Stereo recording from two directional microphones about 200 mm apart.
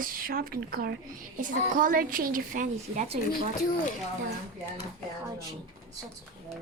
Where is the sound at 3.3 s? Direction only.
45° left (ahead or behind).